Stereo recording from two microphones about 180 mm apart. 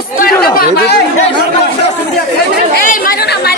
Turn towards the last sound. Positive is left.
turn(degrees=50)  # may be behind; listen again after turning